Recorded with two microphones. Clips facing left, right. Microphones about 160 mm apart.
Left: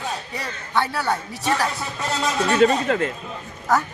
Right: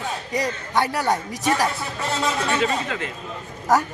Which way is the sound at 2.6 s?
45° left (ahead or behind).